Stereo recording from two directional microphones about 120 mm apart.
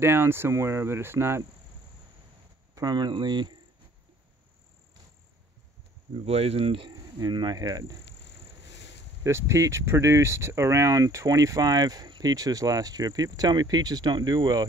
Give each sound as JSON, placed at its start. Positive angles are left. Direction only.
{"t": 0.0, "sound": "cricket", "side_deg": -20}
{"t": 2.7, "sound": "speech", "side_deg": -35}
{"t": 6.2, "sound": "speech", "side_deg": -55}
{"t": 7.2, "sound": "speech", "side_deg": -35}
{"t": 9.2, "sound": "speech", "side_deg": -25}